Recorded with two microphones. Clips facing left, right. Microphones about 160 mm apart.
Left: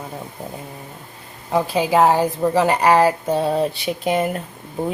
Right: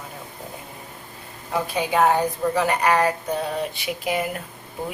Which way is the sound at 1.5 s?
30° left (ahead or behind).